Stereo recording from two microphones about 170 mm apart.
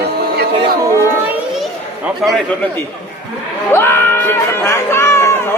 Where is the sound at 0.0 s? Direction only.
70° right (ahead or behind).